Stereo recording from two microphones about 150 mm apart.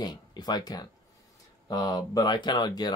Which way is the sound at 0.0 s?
30° left (ahead or behind).